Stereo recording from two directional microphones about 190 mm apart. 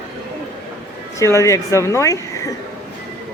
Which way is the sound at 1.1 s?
15° left (ahead or behind).